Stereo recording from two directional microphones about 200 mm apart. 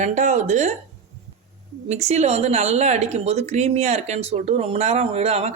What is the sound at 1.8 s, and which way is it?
Speech, 35° right (ahead or behind).